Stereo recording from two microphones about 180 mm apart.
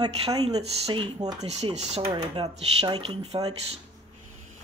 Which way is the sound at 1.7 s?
35° right (ahead or behind).